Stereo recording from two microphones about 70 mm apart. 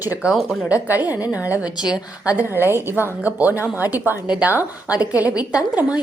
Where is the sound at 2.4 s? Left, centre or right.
Right.